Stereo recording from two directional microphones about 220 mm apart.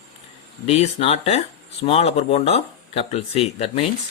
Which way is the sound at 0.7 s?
25° left (ahead or behind).